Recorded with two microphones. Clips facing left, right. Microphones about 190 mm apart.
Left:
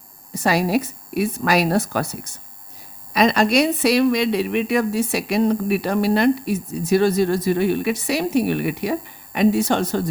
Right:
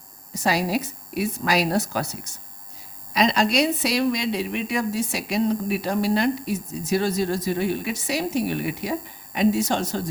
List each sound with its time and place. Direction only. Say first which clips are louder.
0.3 s speech: left 4 dB; 55° left (ahead or behind)